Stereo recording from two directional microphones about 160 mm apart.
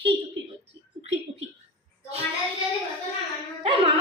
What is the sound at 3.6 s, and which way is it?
Carnatic music, 35° right (ahead or behind).